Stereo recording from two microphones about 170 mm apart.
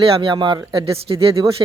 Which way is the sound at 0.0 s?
30° right (ahead or behind).